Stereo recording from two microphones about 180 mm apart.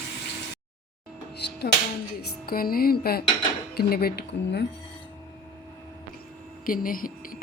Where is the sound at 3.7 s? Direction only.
60° left (ahead or behind).